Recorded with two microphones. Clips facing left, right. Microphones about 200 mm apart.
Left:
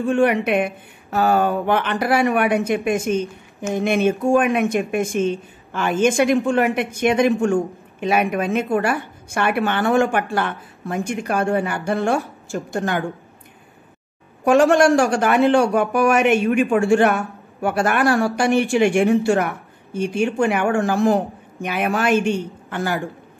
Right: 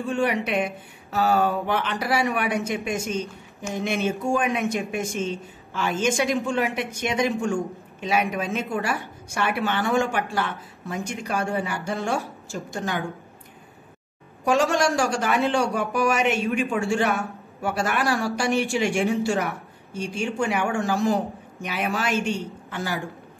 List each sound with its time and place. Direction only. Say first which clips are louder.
0.1 s speech: left 6 dB; 55° left (ahead or behind)
14.4 s speech: left 7 dB; 55° left (ahead or behind)